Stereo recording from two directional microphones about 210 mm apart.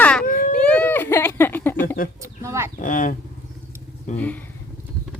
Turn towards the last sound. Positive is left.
turn(degrees=10)  # may be behind; listen again after turning